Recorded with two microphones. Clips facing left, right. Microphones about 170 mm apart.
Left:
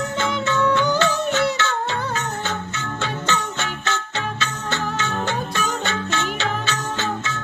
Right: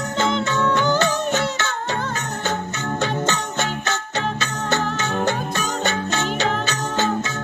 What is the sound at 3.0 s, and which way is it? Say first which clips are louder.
Music: right 1 dB; 40° right (ahead or behind).